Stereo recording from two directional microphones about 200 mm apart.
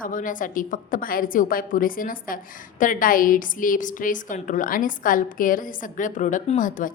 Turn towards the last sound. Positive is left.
turn(degrees=40)  # may be behind; listen again after turning